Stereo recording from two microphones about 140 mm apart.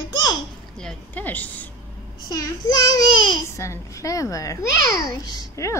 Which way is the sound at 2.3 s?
25° left (ahead or behind).